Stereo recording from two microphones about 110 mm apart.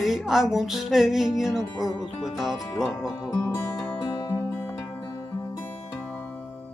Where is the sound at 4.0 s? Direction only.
50° left (ahead or behind).